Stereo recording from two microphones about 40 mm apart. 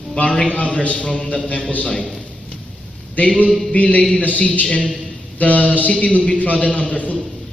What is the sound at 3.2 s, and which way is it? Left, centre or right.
A man's voice, left.